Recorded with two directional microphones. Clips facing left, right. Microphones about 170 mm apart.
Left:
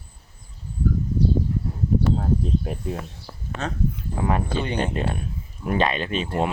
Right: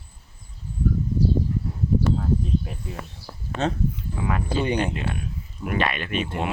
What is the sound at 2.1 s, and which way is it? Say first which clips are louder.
Cricket: left 1 dB; 45° left (ahead or behind).